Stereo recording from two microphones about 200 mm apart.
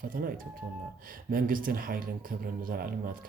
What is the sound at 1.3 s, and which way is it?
Speech, 45° right (ahead or behind).